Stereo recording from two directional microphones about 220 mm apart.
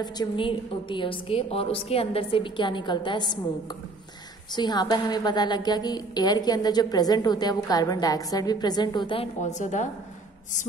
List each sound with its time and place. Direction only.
0.0 s a woman's voice: 20° left (ahead or behind)
4.6 s a woman's voice: 20° left (ahead or behind); by 9.8 s 35° left (ahead or behind)